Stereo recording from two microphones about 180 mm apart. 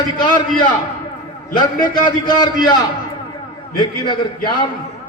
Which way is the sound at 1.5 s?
25° left (ahead or behind).